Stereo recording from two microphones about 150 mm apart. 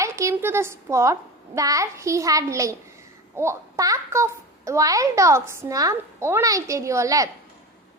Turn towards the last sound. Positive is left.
turn(degrees=-20)  # may be behind; listen again after turning